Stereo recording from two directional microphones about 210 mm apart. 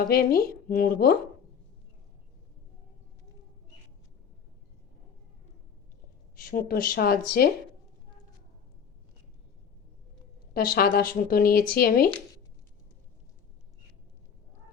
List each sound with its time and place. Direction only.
0.1 s speech: 45° left (ahead or behind)
6.3 s speech: 45° left (ahead or behind)
10.5 s speech: 45° left (ahead or behind)